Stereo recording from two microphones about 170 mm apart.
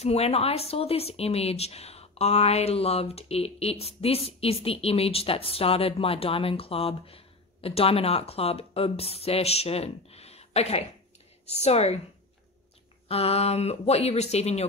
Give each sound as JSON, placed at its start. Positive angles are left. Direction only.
{"t": 0.0, "sound": "speech", "side_deg": 40}
{"t": 13.1, "sound": "speech", "side_deg": 35}